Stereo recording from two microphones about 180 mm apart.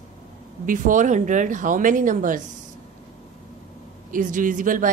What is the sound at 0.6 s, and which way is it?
A woman's voice, 45° right (ahead or behind).